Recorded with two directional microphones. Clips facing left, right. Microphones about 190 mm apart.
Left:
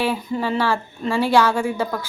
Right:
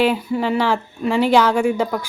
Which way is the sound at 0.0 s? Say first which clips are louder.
Right 4 dB; 10° right (ahead or behind).